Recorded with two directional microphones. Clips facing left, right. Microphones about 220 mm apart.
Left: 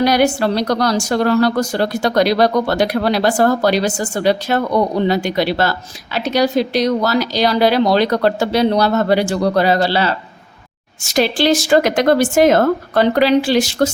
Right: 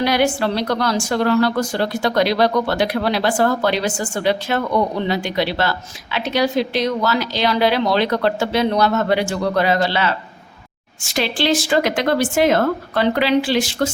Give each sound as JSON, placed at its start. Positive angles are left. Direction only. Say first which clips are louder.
{"t": 0.0, "sound": "a woman's voice", "louder": "left 3 dB", "side_deg": 40}